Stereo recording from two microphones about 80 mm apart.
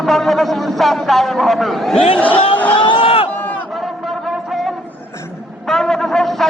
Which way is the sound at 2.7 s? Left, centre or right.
Left.